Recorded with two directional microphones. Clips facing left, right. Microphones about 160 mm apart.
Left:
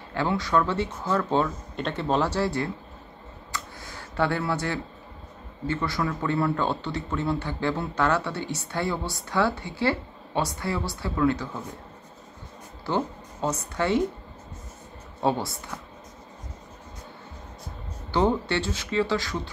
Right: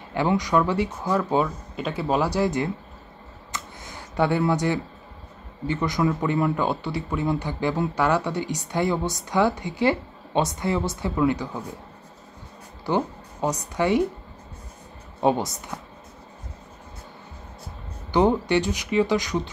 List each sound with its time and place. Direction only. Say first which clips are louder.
0.1 s speech: right 3 dB; 15° right (ahead or behind)
3.5 s a sound: even; 20° right (ahead or behind)
5.7 s speech: right 4 dB; 20° right (ahead or behind)
12.8 s speech: right 3 dB; 15° right (ahead or behind)
15.1 s speech: right 4 dB; 15° right (ahead or behind)
18.1 s speech: right 4 dB; 15° right (ahead or behind)